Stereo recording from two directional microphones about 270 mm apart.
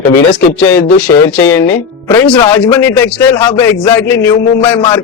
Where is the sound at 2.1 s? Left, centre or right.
Centre.